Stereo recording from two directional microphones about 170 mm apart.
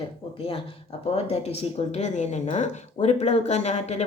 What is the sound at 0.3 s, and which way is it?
Speech, 35° left (ahead or behind).